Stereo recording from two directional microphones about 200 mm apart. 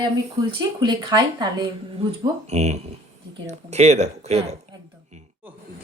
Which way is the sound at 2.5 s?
35° right (ahead or behind).